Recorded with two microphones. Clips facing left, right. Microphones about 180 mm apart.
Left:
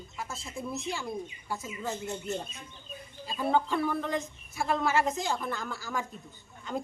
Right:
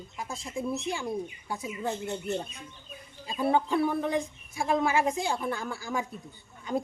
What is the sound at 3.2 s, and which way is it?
Speech, 15° right (ahead or behind).